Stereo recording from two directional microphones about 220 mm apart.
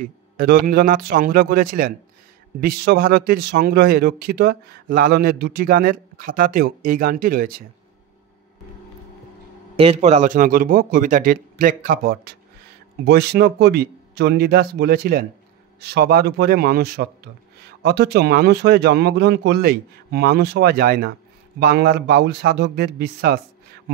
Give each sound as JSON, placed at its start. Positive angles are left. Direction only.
{"t": 0.0, "sound": "a man's voice", "side_deg": -40}
{"t": 9.8, "sound": "a man's voice", "side_deg": -30}